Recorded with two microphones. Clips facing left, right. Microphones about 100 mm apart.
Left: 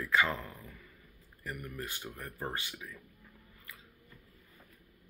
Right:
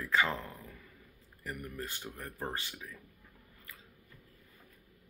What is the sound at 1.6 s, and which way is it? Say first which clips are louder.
Speech: even; 35° right (ahead or behind).